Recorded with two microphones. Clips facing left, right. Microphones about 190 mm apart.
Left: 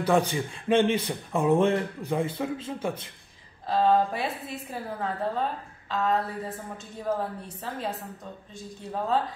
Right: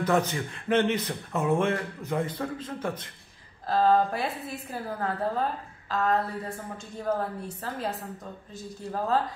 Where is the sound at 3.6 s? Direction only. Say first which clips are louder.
Even; centre (ahead or behind).